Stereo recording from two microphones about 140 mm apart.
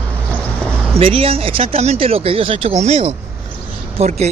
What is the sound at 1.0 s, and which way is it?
Speech, 40° right (ahead or behind).